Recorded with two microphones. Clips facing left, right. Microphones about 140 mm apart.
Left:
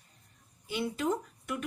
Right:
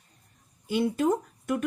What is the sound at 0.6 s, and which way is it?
Speech, 45° right (ahead or behind).